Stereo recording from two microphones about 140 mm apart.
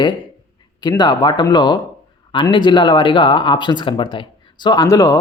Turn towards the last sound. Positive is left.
turn(degrees=25)  # may be behind; listen again after turning